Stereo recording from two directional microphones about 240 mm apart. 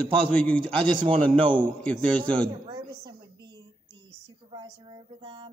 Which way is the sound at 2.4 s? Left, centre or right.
Centre.